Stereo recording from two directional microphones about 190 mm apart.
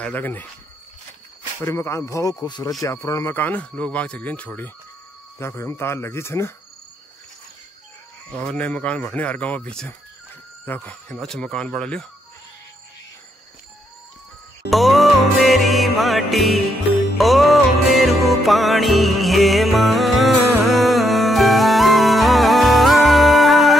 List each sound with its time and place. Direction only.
0.0 s speech: 10° left (ahead or behind)
1.6 s speech: 15° left (ahead or behind)
8.4 s speech: 5° left (ahead or behind)
14.7 s music: centre (ahead or behind)